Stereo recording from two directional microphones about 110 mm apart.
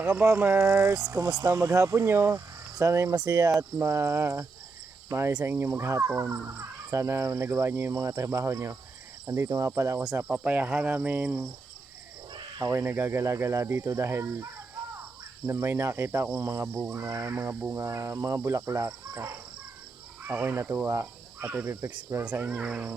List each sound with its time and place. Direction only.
0.0 s speech: 10° right (ahead or behind)
0.3 s cricket: 20° right (ahead or behind)
3.8 s cricket: 25° right (ahead or behind)
5.0 s speech: 25° right (ahead or behind)
5.5 s cricket: 25° right (ahead or behind)
10.2 s speech: 15° right (ahead or behind)
10.7 s speech: 5° right (ahead or behind)
10.9 s speech: 15° right (ahead or behind)
12.7 s cricket: 20° right (ahead or behind)
21.9 s speech: 10° right (ahead or behind)